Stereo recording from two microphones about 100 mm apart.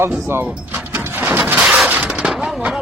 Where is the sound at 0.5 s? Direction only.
15° right (ahead or behind).